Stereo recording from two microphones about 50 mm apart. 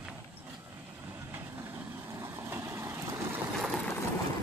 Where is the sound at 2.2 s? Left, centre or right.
Right.